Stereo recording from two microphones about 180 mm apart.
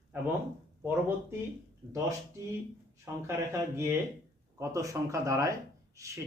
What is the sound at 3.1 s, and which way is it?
Speech, 15° right (ahead or behind).